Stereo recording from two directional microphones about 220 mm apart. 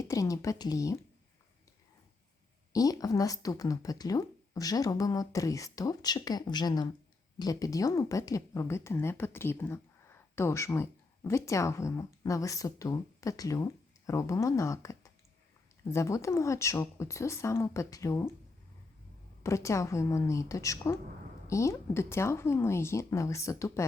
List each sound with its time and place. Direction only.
0.0 s speech: 15° left (ahead or behind)
2.7 s speech: 15° left (ahead or behind)
19.4 s speech: 15° left (ahead or behind)